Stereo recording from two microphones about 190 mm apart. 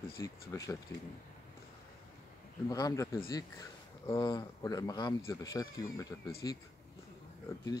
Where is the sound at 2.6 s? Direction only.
20° left (ahead or behind).